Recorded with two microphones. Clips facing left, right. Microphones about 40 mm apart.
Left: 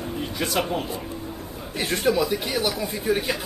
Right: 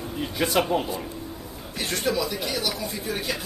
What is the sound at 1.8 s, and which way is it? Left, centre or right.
Speech, centre.